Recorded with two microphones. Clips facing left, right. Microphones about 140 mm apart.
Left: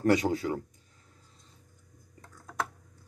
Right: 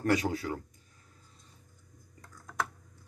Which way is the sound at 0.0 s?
25° left (ahead or behind).